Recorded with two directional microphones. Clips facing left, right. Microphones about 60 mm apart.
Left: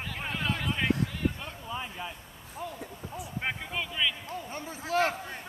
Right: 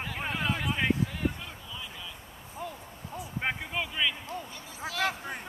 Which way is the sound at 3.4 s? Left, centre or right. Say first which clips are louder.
Right 2 dB; centre.